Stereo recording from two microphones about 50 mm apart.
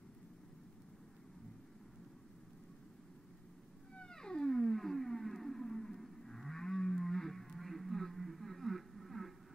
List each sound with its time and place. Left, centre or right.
3.9 s whale vocalization: centre